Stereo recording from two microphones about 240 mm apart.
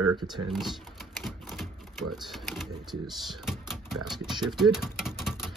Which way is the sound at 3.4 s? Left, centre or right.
Centre.